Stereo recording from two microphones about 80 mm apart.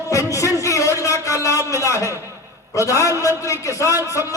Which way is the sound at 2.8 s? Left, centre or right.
Left.